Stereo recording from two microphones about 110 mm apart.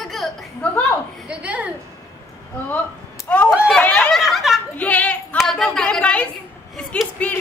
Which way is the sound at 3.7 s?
10° left (ahead or behind).